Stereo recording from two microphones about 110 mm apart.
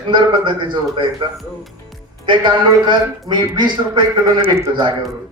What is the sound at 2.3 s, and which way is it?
Speech, 45° right (ahead or behind).